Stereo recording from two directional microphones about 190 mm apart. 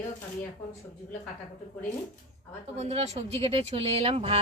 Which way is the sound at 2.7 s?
35° right (ahead or behind).